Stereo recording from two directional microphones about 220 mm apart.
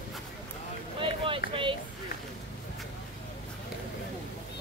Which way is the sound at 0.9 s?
25° right (ahead or behind).